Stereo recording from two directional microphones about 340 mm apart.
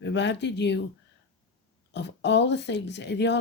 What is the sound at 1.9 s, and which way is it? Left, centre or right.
Speech, left.